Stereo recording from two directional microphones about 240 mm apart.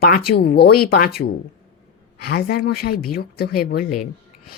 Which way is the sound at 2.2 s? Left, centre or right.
Left.